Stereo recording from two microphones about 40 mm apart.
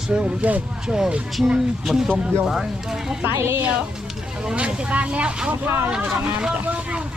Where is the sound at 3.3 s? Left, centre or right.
Right.